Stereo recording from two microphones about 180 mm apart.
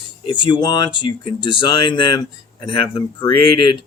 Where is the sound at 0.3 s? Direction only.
25° left (ahead or behind).